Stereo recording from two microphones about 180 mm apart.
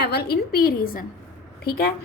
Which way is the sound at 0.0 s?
65° left (ahead or behind).